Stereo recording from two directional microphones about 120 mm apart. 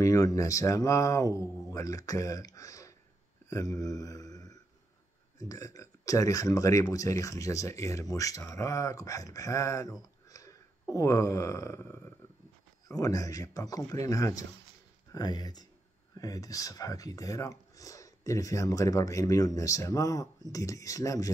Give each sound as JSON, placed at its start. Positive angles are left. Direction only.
{"t": 0.0, "sound": "speech", "side_deg": 30}